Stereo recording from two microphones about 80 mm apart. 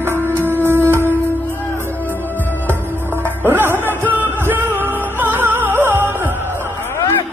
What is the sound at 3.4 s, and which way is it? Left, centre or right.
Music, right.